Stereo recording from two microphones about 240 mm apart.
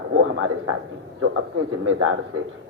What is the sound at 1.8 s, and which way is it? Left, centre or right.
Speech, right.